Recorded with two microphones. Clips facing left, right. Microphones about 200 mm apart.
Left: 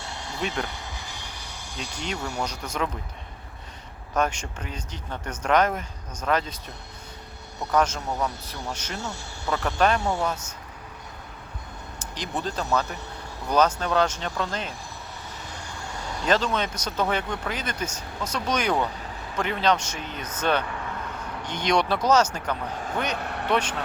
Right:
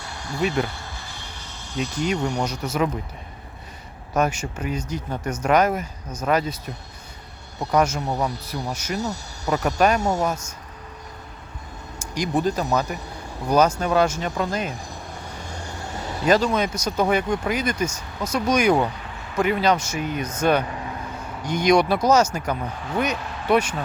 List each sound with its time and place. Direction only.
0.0 s a sound: 25° left (ahead or behind)
0.4 s speech: 10° right (ahead or behind)
0.7 s a sound: 15° left (ahead or behind)
1.8 s speech: 10° right (ahead or behind)
4.1 s speech: 10° right (ahead or behind)
7.7 s speech: 10° right (ahead or behind)
9.0 s speech: 40° right (ahead or behind)
9.6 s speech: 10° right (ahead or behind)
10.0 s speech: 40° right (ahead or behind)
11.9 s a sound: 10° right (ahead or behind)
12.4 s speech: 10° right (ahead or behind)
16.2 s speech: 10° right (ahead or behind)
23.1 s vehicle: 60° left (ahead or behind)
23.5 s speech: 10° right (ahead or behind)